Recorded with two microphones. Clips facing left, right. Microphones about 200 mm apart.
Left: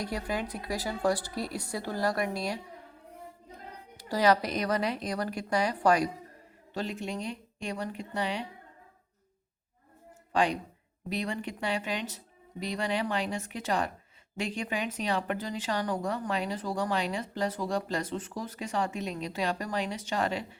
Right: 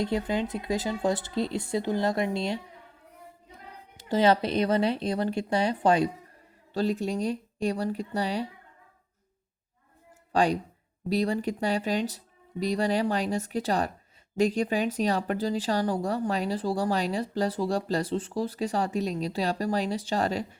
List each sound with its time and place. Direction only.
0.0 s speech: 25° right (ahead or behind)
3.9 s speech: 25° right (ahead or behind)
6.7 s speech: 35° right (ahead or behind)
10.3 s speech: 40° right (ahead or behind)